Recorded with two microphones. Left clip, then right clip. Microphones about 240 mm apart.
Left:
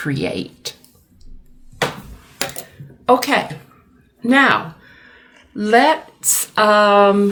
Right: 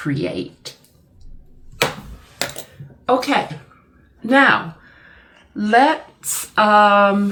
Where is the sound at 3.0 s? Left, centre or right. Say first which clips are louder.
Left 2 dB; left.